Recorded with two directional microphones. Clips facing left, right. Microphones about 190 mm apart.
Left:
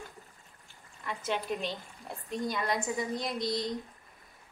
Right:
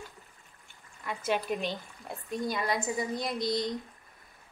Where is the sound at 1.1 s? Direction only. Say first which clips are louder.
Right 3 dB; centre (ahead or behind).